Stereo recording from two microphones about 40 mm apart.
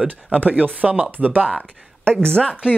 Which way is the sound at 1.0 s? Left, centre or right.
Right.